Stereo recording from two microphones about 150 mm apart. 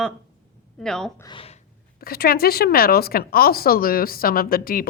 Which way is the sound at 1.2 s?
30° left (ahead or behind).